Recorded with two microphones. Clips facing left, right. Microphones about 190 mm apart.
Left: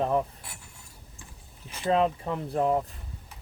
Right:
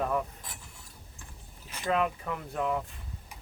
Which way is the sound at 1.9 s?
30° left (ahead or behind).